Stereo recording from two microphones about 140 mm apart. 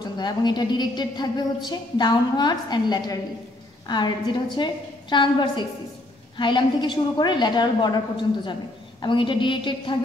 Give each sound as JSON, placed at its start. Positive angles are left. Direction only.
{"t": 0.0, "sound": "a woman's voice", "side_deg": 30}